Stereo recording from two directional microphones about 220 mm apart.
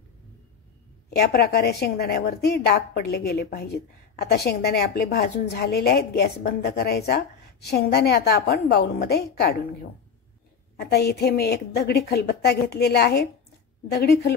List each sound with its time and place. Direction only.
1.1 s a woman's voice: 45° left (ahead or behind)
10.8 s a woman's voice: 45° left (ahead or behind)